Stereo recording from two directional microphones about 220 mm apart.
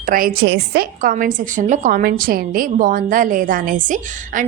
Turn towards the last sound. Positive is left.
turn(degrees=-35)  # may be behind; listen again after turning